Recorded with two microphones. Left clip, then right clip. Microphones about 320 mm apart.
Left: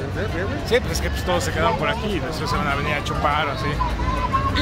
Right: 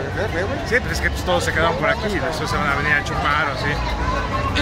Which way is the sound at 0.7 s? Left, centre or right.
Centre.